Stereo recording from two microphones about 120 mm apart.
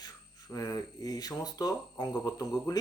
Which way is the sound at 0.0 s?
30° left (ahead or behind).